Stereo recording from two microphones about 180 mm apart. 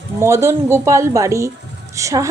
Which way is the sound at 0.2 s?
15° right (ahead or behind).